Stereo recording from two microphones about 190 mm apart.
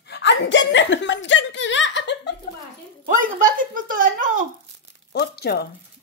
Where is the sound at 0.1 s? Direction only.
65° left (ahead or behind).